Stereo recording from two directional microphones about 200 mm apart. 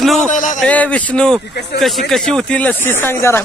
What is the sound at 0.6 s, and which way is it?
Speech, 5° left (ahead or behind).